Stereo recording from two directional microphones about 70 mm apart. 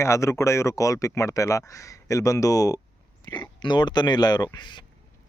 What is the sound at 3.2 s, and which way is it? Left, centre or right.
Speech, left.